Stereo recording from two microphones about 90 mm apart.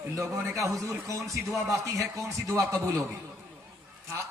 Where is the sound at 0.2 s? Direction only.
35° right (ahead or behind).